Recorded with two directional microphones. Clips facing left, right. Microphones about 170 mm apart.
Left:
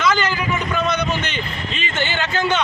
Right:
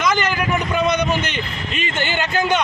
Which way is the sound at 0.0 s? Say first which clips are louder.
Even; 15° right (ahead or behind).